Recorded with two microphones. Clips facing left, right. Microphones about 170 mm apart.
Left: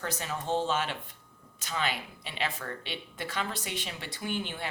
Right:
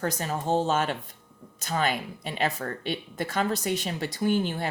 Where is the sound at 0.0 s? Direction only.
40° right (ahead or behind).